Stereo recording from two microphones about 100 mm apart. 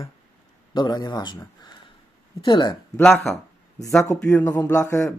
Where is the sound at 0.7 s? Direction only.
45° left (ahead or behind).